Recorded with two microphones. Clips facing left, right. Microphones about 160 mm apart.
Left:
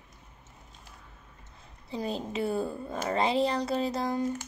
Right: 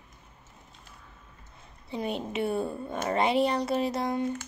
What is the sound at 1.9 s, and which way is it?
Speech, 30° left (ahead or behind).